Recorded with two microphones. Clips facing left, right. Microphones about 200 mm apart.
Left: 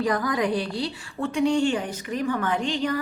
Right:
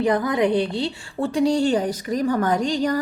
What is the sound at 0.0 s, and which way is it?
A woman's voice, 25° right (ahead or behind).